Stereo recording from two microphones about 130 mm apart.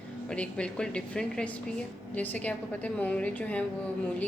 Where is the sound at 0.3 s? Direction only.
10° left (ahead or behind).